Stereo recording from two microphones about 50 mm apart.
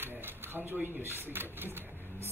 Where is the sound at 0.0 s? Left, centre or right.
Right.